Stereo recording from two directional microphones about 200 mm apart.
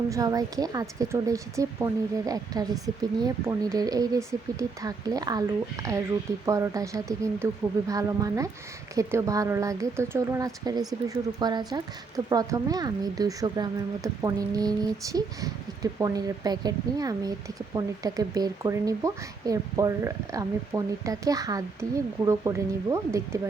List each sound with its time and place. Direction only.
0.1 s a woman's voice: 15° right (ahead or behind)